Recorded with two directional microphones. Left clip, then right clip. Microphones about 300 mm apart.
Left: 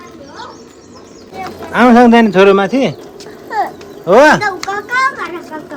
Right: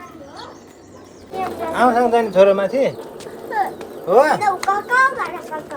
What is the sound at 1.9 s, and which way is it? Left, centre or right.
Speech, left.